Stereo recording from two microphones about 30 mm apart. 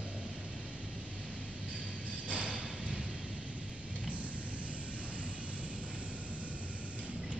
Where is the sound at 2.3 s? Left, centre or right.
Right.